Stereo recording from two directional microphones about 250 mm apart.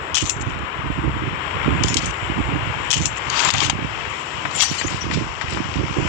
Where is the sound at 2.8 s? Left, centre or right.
Left.